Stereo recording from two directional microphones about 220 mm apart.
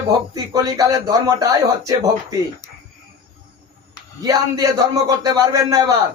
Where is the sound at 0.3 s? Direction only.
15° right (ahead or behind).